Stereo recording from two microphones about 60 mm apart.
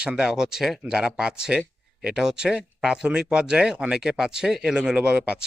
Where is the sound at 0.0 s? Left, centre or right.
Centre.